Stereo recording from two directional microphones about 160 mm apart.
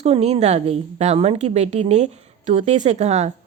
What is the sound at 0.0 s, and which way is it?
Speech, 40° right (ahead or behind).